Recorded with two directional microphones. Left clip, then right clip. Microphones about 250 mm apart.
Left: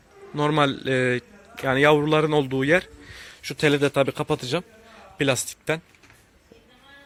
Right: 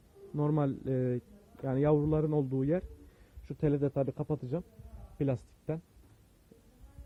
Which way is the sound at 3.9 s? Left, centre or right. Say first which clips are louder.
Left 11 dB; left.